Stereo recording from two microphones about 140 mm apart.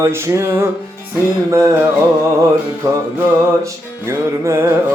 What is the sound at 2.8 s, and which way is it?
Music, 25° right (ahead or behind).